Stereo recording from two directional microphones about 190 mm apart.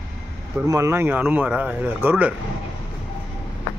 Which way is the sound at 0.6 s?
15° right (ahead or behind).